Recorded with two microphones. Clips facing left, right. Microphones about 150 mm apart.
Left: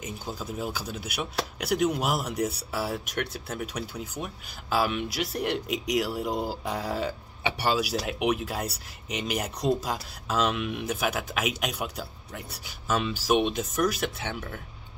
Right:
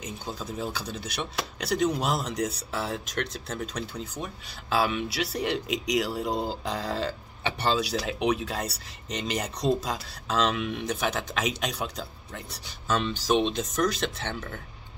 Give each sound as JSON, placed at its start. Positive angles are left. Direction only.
{"t": 0.0, "sound": "speech", "side_deg": 5}